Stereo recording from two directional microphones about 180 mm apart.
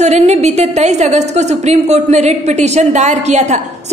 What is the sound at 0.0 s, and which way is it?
A woman's voice, 40° right (ahead or behind).